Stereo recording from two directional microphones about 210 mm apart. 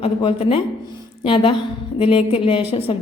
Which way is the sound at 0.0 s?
25° left (ahead or behind).